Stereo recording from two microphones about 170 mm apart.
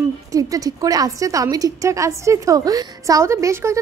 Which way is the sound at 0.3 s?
20° right (ahead or behind).